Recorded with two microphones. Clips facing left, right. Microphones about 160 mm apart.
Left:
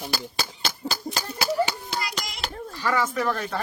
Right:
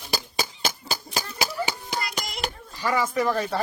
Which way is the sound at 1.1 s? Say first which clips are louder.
Even; 50° left (ahead or behind).